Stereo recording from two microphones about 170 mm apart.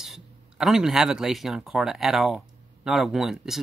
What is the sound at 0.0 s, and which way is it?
Speech, centre (ahead or behind).